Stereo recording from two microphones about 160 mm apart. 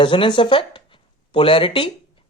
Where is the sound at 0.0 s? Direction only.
30° left (ahead or behind).